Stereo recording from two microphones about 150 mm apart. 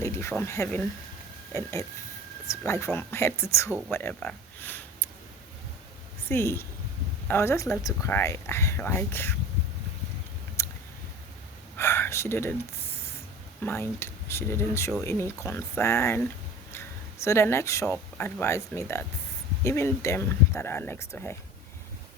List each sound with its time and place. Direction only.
0.0 s speech: 15° left (ahead or behind)
2.5 s speech: 20° left (ahead or behind)
6.2 s a woman's voice: 15° left (ahead or behind)
10.6 s a sound: 20° left (ahead or behind)
11.8 s speech: 15° left (ahead or behind)
13.6 s speech: 15° left (ahead or behind)
17.2 s speech: 15° left (ahead or behind)